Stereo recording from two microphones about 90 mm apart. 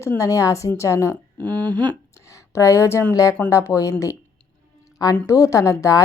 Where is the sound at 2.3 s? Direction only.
35° left (ahead or behind).